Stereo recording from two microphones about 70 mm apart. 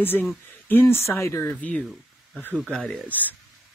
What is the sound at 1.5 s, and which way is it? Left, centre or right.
Speech, centre.